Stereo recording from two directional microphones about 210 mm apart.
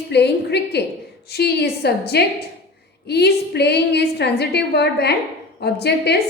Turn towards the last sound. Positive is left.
turn(degrees=50)  # may be behind; listen again after turning